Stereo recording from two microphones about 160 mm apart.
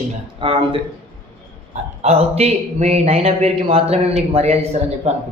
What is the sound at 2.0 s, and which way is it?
Speech, 40° right (ahead or behind).